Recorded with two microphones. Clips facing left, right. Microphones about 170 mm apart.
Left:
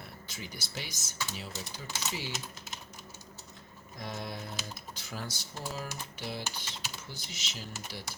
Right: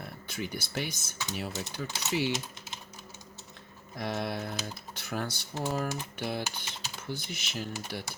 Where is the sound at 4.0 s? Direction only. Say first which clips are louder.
Right 7 dB; 70° right (ahead or behind).